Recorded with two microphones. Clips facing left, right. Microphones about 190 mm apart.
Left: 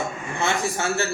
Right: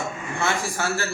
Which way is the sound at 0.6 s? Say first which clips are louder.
Left 2 dB; 20° left (ahead or behind).